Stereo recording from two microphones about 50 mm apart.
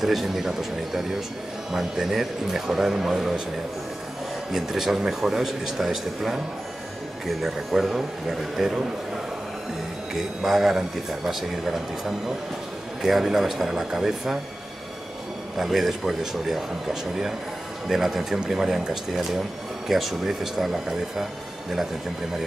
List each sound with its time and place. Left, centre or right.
0.0 s a man's voice: centre
4.5 s a man's voice: centre
10.1 s a man's voice: centre
15.5 s a man's voice: centre